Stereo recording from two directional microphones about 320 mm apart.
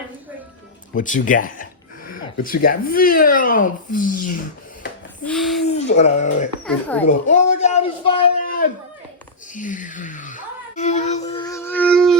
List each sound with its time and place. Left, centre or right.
0.9 s speech: left
5.2 s speech: centre
5.6 s speech: left
6.7 s speech: centre
7.1 s speech: left
9.6 s a sound: left; by 12.1 s centre